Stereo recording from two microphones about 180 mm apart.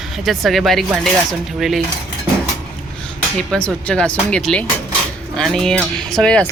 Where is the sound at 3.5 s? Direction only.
5° left (ahead or behind).